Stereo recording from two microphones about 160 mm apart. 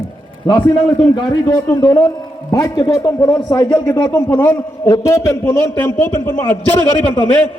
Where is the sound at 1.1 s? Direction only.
25° left (ahead or behind).